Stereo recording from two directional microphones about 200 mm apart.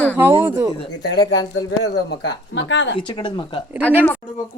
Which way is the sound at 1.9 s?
60° left (ahead or behind).